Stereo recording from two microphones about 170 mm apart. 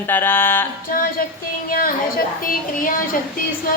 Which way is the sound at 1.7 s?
60° left (ahead or behind).